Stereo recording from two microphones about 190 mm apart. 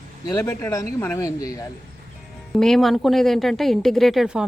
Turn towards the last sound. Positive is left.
turn(degrees=-5)  # may be behind; listen again after turning